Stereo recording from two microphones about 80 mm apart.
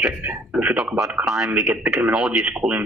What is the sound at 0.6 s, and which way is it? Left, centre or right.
A man's voice, centre.